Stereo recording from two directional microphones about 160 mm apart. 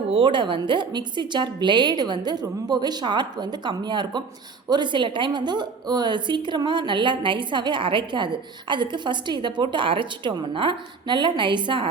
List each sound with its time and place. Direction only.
0.1 s a woman's voice: 30° right (ahead or behind)